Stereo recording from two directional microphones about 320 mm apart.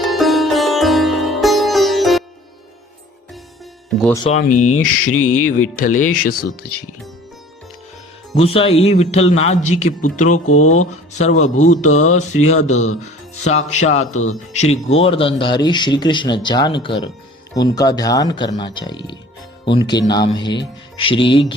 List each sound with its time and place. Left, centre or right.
0.0 s sitar: centre
3.8 s music: centre
4.2 s speech: left
8.4 s speech: centre